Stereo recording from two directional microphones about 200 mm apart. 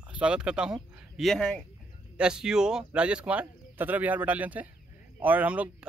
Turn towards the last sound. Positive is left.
turn(degrees=-5)  # may be behind; listen again after turning